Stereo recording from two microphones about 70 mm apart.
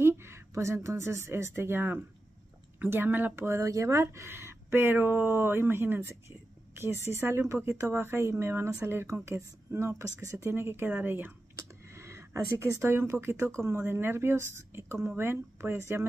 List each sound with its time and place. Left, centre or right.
0.0 s speech: right
11.5 s speech: right